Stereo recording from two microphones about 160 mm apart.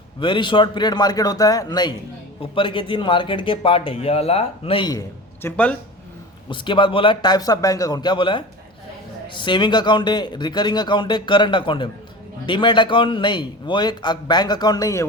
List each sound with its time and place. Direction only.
0.2 s a man's voice: 30° left (ahead or behind); by 5.7 s 10° left (ahead or behind)
6.5 s a man's voice: 30° left (ahead or behind)